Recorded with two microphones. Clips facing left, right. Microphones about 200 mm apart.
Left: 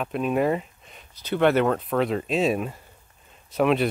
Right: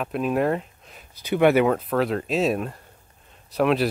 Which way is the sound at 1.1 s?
10° right (ahead or behind).